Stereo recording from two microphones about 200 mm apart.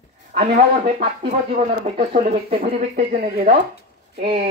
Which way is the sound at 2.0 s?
25° right (ahead or behind).